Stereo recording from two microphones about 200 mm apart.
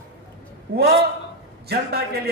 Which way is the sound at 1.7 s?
50° right (ahead or behind).